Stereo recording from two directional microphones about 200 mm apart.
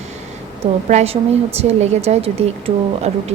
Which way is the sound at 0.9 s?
30° right (ahead or behind).